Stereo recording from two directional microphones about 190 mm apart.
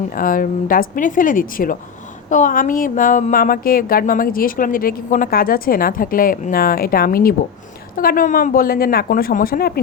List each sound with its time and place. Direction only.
0.1 s speech: 45° left (ahead or behind)